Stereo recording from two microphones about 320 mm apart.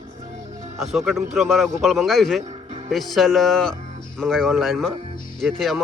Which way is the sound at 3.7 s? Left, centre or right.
Right.